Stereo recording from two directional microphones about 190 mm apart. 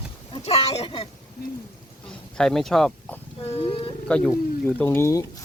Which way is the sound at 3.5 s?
30° left (ahead or behind).